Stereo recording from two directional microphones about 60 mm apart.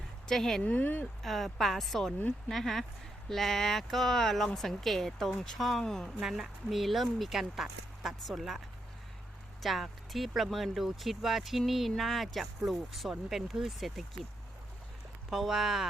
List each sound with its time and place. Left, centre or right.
0.3 s speech: centre
0.6 s speech: left
1.2 s speech: centre
6.2 s speech: centre
9.6 s speech: centre
15.3 s speech: centre